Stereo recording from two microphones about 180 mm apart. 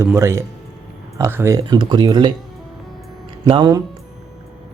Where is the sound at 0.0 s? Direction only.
15° right (ahead or behind).